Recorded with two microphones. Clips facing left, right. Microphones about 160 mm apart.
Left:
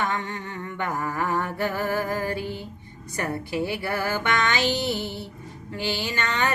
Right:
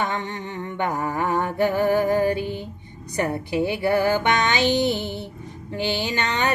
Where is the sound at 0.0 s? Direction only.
20° right (ahead or behind).